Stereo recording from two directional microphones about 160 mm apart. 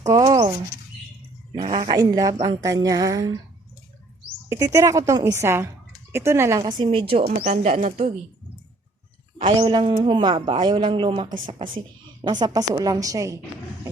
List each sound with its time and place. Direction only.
0.1 s speech: 25° right (ahead or behind)
1.9 s a woman's voice: 25° right (ahead or behind)
4.4 s a woman's voice: 20° right (ahead or behind); by 7.3 s 35° right (ahead or behind)
7.4 s speech: 45° right (ahead or behind)
9.4 s a woman's voice: 30° right (ahead or behind)